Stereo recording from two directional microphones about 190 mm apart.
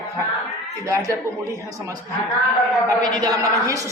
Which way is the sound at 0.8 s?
15° right (ahead or behind).